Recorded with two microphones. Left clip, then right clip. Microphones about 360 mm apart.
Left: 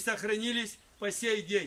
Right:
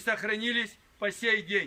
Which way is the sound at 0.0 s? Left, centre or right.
Centre.